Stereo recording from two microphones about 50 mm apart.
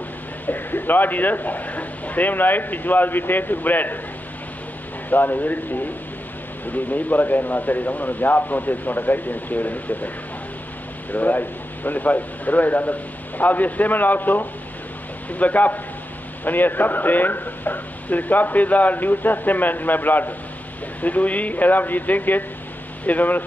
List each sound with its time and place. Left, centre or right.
0.5 s speech: left
5.1 s speech: left